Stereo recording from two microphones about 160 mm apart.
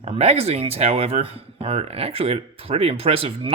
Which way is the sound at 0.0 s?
40° right (ahead or behind).